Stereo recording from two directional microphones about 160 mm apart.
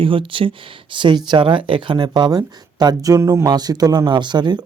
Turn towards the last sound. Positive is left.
turn(degrees=-25)  # may be behind; listen again after turning